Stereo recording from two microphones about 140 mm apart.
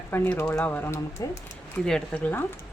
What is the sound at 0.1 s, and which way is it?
Speech, 10° left (ahead or behind).